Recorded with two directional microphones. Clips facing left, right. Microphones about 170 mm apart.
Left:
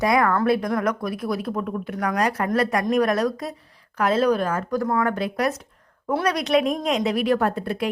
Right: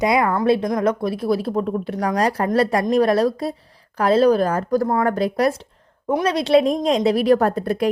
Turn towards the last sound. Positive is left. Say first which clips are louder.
# right 4 dB
turn(degrees=-40)  # may be behind; listen again after turning